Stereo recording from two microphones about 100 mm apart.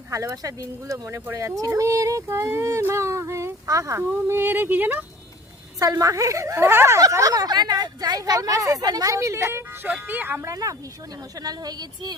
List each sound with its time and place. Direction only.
0.1 s a woman's voice: 35° right (ahead or behind); by 5.0 s 20° right (ahead or behind)
5.8 s a woman's voice: 35° right (ahead or behind)
10.5 s a woman's voice: 35° right (ahead or behind)